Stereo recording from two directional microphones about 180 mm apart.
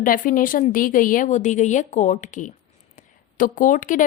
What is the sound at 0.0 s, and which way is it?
Speech, 50° left (ahead or behind).